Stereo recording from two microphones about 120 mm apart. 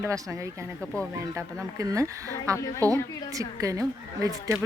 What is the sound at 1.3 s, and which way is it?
A woman's voice, 30° right (ahead or behind).